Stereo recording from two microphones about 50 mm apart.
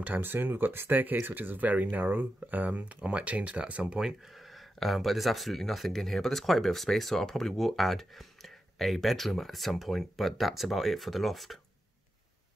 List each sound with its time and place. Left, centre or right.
0.0 s speech: right
4.0 s speech: centre